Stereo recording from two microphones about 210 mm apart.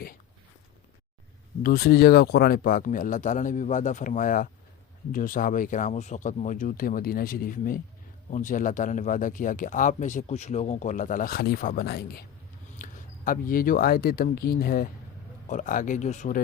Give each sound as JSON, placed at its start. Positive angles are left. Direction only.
{"t": 1.6, "sound": "speech", "side_deg": 45}